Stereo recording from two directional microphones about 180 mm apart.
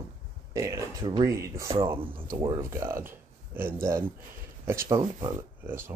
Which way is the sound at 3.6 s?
50° right (ahead or behind).